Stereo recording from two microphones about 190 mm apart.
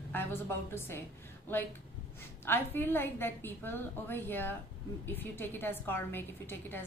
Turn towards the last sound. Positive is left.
turn(degrees=10)  # may be behind; listen again after turning